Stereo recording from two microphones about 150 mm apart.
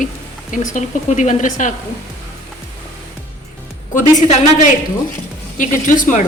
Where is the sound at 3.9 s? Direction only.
60° left (ahead or behind).